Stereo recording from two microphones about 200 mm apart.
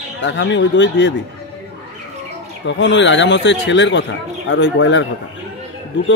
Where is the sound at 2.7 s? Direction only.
65° left (ahead or behind).